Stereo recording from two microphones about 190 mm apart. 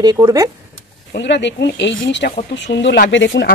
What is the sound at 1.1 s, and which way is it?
Speech, 65° left (ahead or behind).